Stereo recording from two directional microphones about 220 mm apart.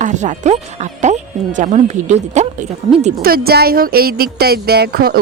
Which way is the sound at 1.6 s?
30° right (ahead or behind).